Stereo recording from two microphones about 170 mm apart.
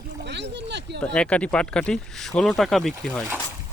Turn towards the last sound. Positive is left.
turn(degrees=0)  # may be behind; listen again after turning